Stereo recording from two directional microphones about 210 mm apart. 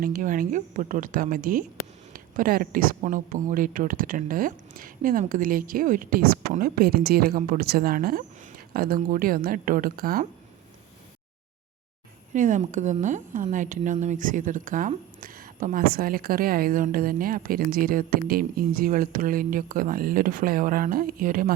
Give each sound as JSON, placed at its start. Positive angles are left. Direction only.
{"t": 0.0, "sound": "a woman's voice", "side_deg": -40}
{"t": 12.3, "sound": "a woman's voice", "side_deg": -35}